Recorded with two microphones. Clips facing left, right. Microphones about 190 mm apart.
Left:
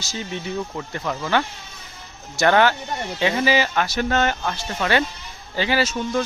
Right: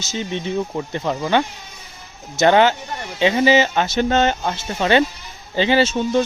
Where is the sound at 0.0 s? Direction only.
20° right (ahead or behind).